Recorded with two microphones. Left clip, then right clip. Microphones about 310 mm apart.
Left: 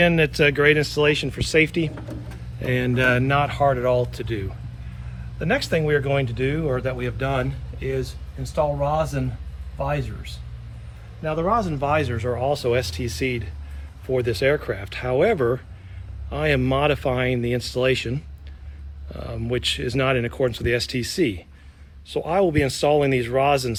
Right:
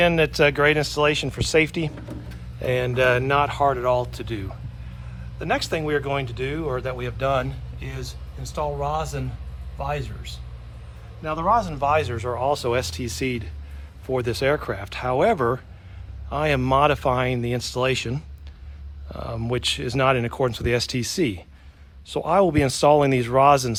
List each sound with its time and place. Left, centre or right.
0.0 s a man's voice: centre
11.2 s speech: centre